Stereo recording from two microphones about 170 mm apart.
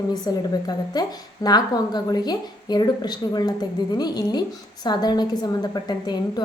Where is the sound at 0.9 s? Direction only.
20° left (ahead or behind).